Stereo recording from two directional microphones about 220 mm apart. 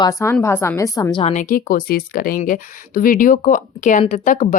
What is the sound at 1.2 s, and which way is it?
Speech, 30° left (ahead or behind).